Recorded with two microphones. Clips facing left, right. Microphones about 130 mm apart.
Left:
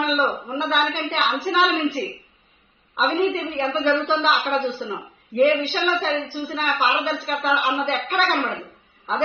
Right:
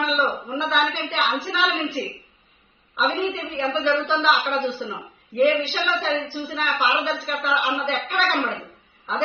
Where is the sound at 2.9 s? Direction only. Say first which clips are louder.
Left 3 dB; 45° left (ahead or behind).